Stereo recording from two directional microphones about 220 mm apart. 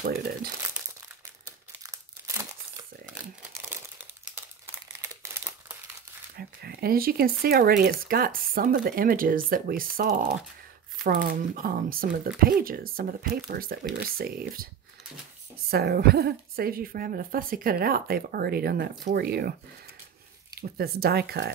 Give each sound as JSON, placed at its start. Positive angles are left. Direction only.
{"t": 0.0, "sound": "speech", "side_deg": -45}
{"t": 1.8, "sound": "crumpling", "side_deg": -15}
{"t": 6.3, "sound": "a sound", "side_deg": -45}
{"t": 7.4, "sound": "speech", "side_deg": -45}
{"t": 15.7, "sound": "speech", "side_deg": -45}
{"t": 20.7, "sound": "speech", "side_deg": -45}